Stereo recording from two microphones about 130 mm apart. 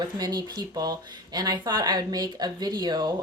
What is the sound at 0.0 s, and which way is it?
Speech, 30° right (ahead or behind).